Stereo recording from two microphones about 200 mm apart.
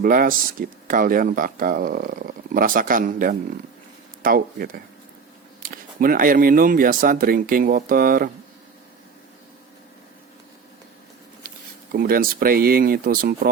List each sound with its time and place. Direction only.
0.0 s speech: 45° right (ahead or behind)
11.4 s speech: 45° right (ahead or behind)